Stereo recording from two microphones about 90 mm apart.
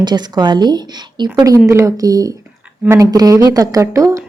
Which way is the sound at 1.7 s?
35° right (ahead or behind).